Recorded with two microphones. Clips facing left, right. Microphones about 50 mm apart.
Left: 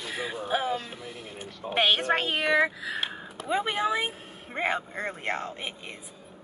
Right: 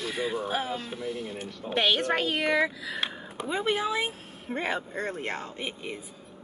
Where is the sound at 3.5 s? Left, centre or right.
Centre.